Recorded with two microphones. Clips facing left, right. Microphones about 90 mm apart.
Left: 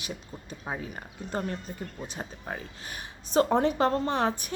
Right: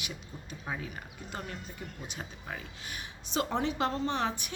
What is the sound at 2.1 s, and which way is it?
Speech, 35° left (ahead or behind).